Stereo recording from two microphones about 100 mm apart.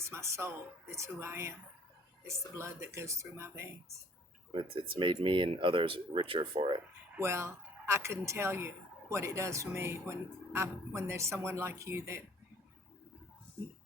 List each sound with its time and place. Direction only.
0.0 s a woman's voice: 30° right (ahead or behind)
2.6 s a woman's voice: 25° right (ahead or behind)
4.5 s speech: 55° right (ahead or behind)
7.2 s a woman's voice: 30° right (ahead or behind)